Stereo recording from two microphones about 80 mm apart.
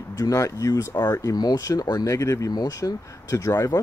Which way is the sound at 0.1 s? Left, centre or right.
Left.